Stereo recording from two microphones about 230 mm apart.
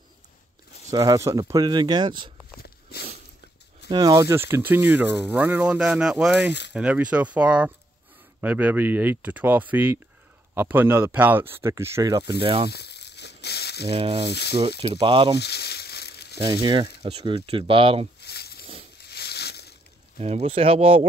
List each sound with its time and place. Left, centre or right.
0.9 s speech: centre
3.9 s speech: centre
12.6 s a sound: left
13.8 s speech: right
14.3 s speech: left
14.8 s speech: right
15.3 s crumpling: left
16.6 s speech: right
18.2 s a sound: left
19.0 s crushing: left
20.2 s speech: right